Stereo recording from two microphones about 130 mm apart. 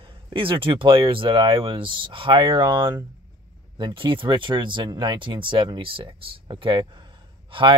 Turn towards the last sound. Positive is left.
turn(degrees=-40)  # may be behind; listen again after turning